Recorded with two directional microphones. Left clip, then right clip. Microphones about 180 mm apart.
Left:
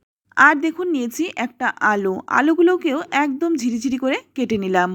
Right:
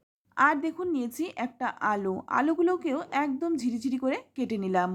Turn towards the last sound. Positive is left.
turn(degrees=30)  # may be behind; listen again after turning